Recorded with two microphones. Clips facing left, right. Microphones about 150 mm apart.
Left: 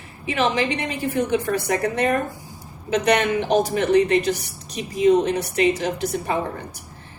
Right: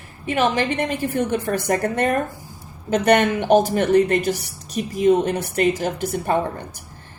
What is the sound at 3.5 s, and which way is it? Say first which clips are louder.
A woman's voice: right 3 dB; 50° right (ahead or behind).